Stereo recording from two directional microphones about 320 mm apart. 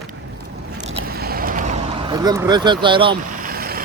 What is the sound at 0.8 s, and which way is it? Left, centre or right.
Vehicle, right.